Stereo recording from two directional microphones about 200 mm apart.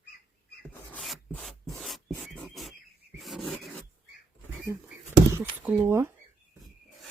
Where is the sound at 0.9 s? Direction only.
5° left (ahead or behind).